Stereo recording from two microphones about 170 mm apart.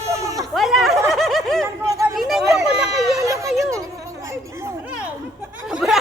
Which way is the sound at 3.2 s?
20° right (ahead or behind).